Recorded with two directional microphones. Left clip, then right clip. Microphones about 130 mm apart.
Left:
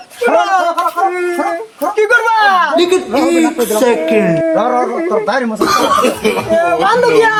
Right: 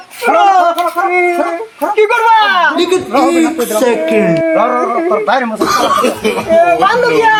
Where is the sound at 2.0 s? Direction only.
30° left (ahead or behind).